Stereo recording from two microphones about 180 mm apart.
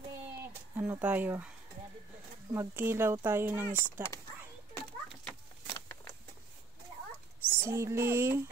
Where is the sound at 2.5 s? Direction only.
15° right (ahead or behind).